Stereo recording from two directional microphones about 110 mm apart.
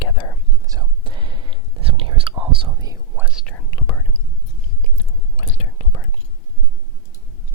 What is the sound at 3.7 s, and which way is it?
Whispering, 40° left (ahead or behind).